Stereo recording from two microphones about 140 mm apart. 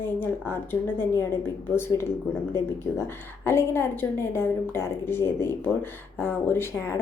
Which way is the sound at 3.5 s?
15° left (ahead or behind).